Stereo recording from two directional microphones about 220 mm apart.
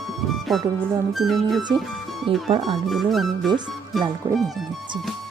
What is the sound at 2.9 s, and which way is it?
Speech, centre (ahead or behind).